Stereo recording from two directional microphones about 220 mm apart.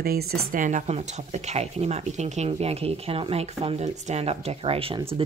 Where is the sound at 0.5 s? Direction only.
35° right (ahead or behind).